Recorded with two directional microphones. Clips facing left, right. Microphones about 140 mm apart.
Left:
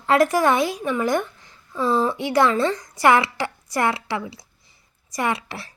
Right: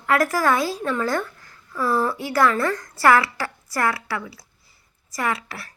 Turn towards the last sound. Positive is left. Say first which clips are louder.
# left 2 dB
turn(degrees=25)  # may be behind; listen again after turning